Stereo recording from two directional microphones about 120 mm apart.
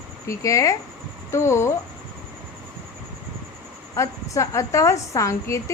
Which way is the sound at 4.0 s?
25° left (ahead or behind).